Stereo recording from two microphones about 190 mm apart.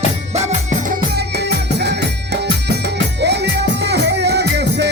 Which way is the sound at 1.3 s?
60° right (ahead or behind).